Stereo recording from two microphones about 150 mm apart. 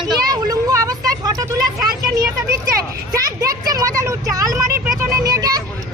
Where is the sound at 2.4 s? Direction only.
20° right (ahead or behind).